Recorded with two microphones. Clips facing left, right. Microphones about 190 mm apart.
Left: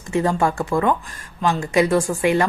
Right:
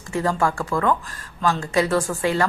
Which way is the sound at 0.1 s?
20° left (ahead or behind).